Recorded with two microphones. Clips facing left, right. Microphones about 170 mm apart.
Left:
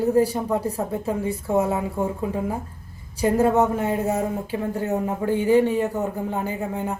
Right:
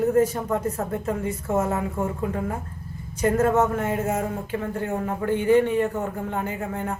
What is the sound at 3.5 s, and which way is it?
Speech, 15° left (ahead or behind).